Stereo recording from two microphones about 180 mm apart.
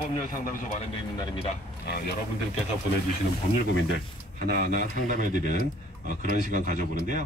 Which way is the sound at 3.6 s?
50° right (ahead or behind).